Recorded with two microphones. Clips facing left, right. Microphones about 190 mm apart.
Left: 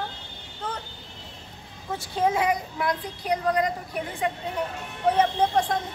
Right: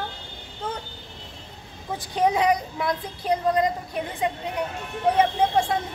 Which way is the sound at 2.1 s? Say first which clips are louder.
Right 3 dB; 15° right (ahead or behind).